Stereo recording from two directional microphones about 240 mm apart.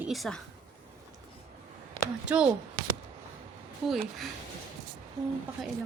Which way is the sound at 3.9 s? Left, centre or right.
Centre.